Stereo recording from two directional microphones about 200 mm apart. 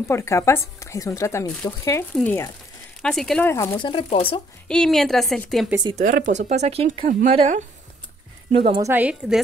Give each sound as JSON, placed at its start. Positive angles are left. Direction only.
{"t": 0.1, "sound": "a woman's voice", "side_deg": 15}
{"t": 3.7, "sound": "speech", "side_deg": 25}
{"t": 4.6, "sound": "a woman's voice", "side_deg": 0}
{"t": 6.0, "sound": "a woman's voice", "side_deg": -40}
{"t": 8.8, "sound": "a woman's voice", "side_deg": -10}